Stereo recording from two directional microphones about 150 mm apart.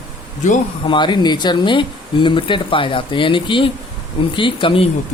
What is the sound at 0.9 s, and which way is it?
Speech, 30° left (ahead or behind).